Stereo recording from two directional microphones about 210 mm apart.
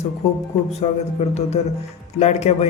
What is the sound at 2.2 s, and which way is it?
Speech, 30° left (ahead or behind).